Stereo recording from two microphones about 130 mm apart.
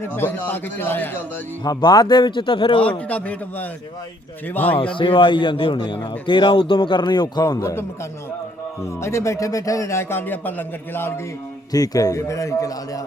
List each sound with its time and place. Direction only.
0.0 s a man's voice: 15° left (ahead or behind)
1.6 s a man's voice: 30° left (ahead or behind)
3.1 s a man's voice: 10° left (ahead or behind)
4.8 s a man's voice: 40° left (ahead or behind); by 11.2 s 15° left (ahead or behind)
11.7 s speech: 30° left (ahead or behind)